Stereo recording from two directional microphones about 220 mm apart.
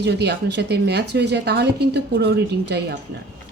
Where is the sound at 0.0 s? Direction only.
50° right (ahead or behind).